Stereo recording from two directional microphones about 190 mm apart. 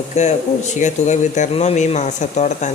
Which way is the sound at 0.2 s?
35° left (ahead or behind).